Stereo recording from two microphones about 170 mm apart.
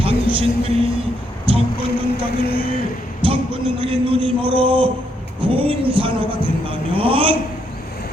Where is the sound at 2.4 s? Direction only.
60° left (ahead or behind).